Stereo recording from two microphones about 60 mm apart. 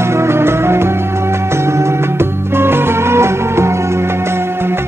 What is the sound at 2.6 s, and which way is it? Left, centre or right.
Music, right.